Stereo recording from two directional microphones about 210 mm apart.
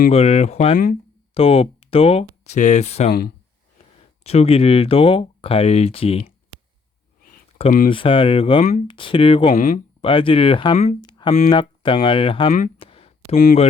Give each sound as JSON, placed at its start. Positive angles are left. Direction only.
{"t": 0.1, "sound": "speech", "side_deg": 30}
{"t": 3.1, "sound": "speech", "side_deg": 45}
{"t": 4.2, "sound": "speech", "side_deg": 30}
{"t": 7.6, "sound": "speech", "side_deg": 40}
{"t": 7.9, "sound": "speech", "side_deg": 25}
{"t": 9.6, "sound": "speech", "side_deg": 40}
{"t": 10.0, "sound": "speech", "side_deg": 25}
{"t": 12.8, "sound": "a sound", "side_deg": 25}
{"t": 13.3, "sound": "speech", "side_deg": 40}